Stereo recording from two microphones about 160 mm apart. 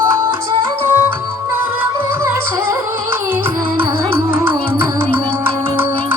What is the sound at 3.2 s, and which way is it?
Music, 15° right (ahead or behind).